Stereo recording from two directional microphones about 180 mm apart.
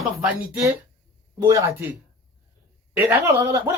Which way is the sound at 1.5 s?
15° right (ahead or behind).